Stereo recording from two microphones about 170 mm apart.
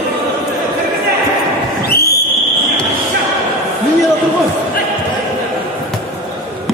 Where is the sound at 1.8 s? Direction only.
65° left (ahead or behind).